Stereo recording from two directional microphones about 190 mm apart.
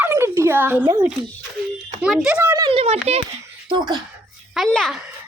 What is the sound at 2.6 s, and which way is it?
Speech, 30° right (ahead or behind).